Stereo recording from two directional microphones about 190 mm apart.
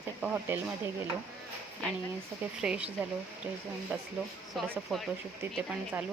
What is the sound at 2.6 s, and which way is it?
Speech, 5° right (ahead or behind).